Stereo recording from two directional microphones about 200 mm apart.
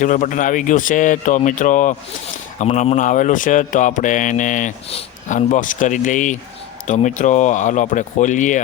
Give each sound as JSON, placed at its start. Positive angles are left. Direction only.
{"t": 0.0, "sound": "speech", "side_deg": 40}